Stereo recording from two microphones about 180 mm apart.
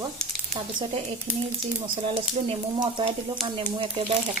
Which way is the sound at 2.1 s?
30° right (ahead or behind).